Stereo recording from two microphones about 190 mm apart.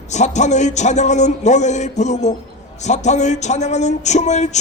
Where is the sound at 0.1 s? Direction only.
40° left (ahead or behind).